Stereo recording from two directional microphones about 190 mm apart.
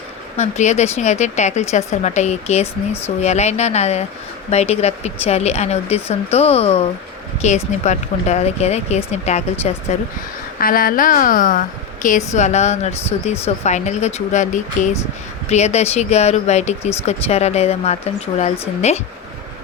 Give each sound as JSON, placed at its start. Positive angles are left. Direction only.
{"t": 0.3, "sound": "speech", "side_deg": 35}
{"t": 10.6, "sound": "a woman's voice", "side_deg": 50}